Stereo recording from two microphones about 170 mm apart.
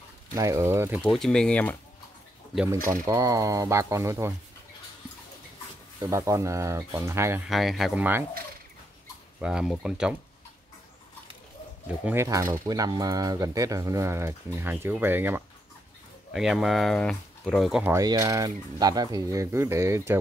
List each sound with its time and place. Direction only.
0.4 s speech: 15° right (ahead or behind)
1.1 s speech: 5° left (ahead or behind)
2.9 s speech: 20° right (ahead or behind)
6.0 s speech: 20° right (ahead or behind)
7.4 s speech: centre (ahead or behind)
9.4 s speech: 5° right (ahead or behind)
12.0 s speech: 15° right (ahead or behind)
17.9 s speech: 20° right (ahead or behind)